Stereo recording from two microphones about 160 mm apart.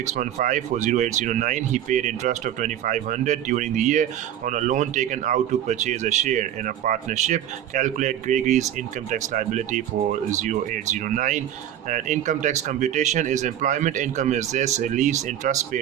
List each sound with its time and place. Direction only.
0.1 s speech: 55° right (ahead or behind)